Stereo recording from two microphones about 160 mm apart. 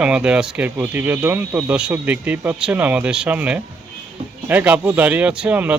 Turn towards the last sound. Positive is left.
turn(degrees=-10)  # may be behind; listen again after turning